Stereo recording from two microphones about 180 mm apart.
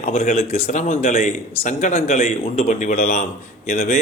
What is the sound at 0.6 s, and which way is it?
Speech, 35° left (ahead or behind).